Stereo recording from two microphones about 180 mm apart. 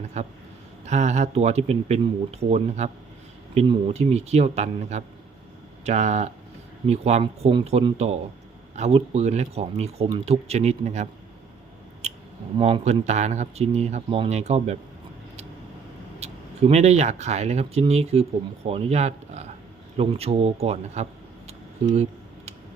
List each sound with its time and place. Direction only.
0.1 s speech: 40° right (ahead or behind)
12.0 s clicking: 40° right (ahead or behind)
12.5 s speech: 30° right (ahead or behind)
16.2 s speech: 35° right (ahead or behind)